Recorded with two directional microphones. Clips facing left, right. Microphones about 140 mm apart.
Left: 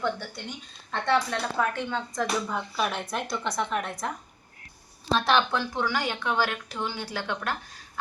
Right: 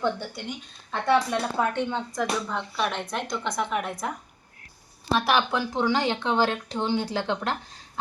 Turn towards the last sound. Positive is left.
turn(degrees=-20)  # may be behind; listen again after turning